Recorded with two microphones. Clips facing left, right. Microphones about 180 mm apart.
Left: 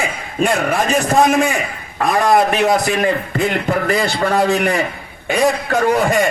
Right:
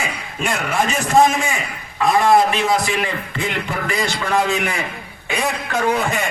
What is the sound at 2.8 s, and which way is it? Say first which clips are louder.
A man's voice: left 6 dB; 40° left (ahead or behind).